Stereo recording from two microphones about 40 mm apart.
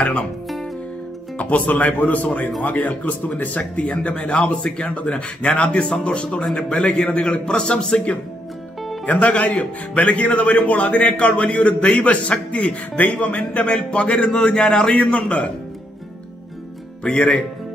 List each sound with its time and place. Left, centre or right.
1.4 s a man's voice: left
9.0 s a man's voice: left
17.0 s speech: left